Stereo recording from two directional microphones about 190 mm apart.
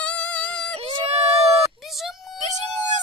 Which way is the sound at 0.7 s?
35° right (ahead or behind).